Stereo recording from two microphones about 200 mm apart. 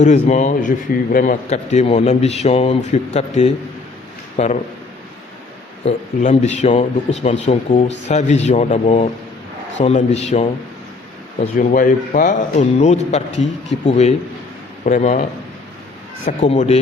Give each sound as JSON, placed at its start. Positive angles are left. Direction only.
{"t": 0.0, "sound": "a man's voice", "side_deg": 35}
{"t": 5.8, "sound": "a man's voice", "side_deg": 35}
{"t": 11.5, "sound": "a man's voice", "side_deg": 45}